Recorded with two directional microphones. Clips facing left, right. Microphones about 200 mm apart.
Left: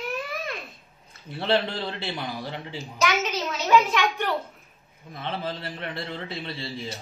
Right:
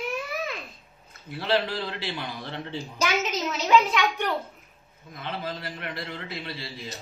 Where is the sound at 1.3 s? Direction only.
25° left (ahead or behind).